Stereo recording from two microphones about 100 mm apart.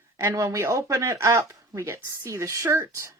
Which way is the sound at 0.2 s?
30° right (ahead or behind).